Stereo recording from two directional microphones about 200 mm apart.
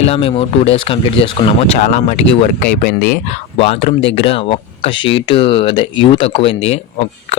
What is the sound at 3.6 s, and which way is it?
Speech, 30° left (ahead or behind).